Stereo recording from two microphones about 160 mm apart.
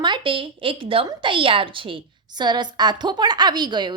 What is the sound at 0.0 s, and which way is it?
A woman's voice, 30° right (ahead or behind).